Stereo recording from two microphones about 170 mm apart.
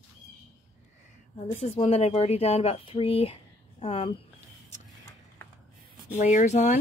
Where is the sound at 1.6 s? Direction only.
35° left (ahead or behind).